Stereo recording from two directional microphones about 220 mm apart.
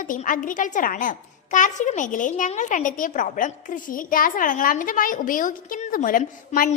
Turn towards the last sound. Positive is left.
turn(degrees=40)  # may be behind; listen again after turning